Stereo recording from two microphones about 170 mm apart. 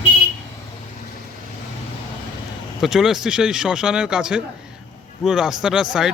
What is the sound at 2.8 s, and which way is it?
Speech, centre (ahead or behind).